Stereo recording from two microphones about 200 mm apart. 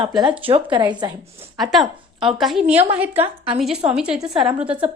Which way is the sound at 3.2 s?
30° right (ahead or behind).